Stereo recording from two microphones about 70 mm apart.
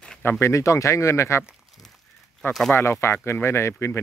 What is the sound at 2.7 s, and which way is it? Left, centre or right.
Speech, left.